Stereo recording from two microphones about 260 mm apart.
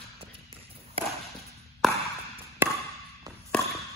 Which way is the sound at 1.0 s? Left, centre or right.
Right.